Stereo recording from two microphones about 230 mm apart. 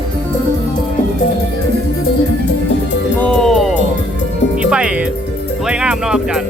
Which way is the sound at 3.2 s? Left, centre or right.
Centre.